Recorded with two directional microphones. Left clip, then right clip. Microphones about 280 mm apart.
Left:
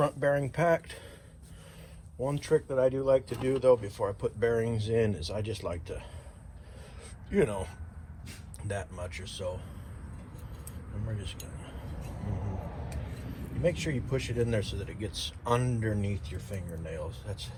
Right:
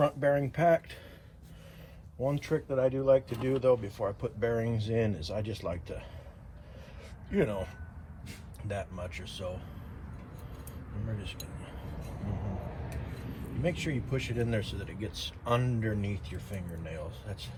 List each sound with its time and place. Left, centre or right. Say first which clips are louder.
0.0 s speech: even; left
2.2 s speech: left 3 dB; left
7.3 s speech: left 2 dB; left
13.6 s speech: left 3 dB; left